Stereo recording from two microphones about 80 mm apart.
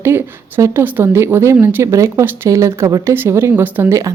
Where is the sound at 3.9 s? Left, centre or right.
Right.